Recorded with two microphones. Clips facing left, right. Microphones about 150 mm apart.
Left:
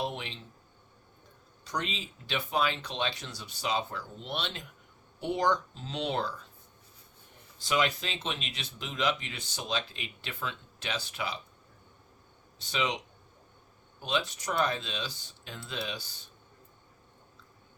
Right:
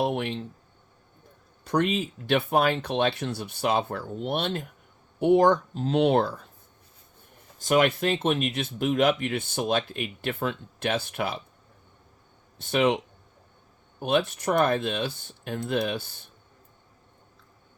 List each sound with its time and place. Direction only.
0.0 s speech: 55° right (ahead or behind)
1.6 s speech: 55° right (ahead or behind)
7.6 s speech: 50° right (ahead or behind)
12.5 s speech: 55° right (ahead or behind)
14.0 s speech: 55° right (ahead or behind)